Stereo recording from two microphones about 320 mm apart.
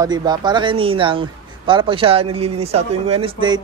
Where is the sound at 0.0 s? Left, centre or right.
Centre.